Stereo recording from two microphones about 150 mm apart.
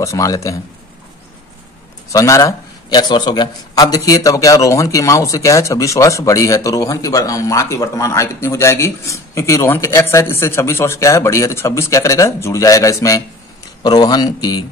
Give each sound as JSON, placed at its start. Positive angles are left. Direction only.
{"t": 0.0, "sound": "a man's voice", "side_deg": 20}
{"t": 2.1, "sound": "a man's voice", "side_deg": 20}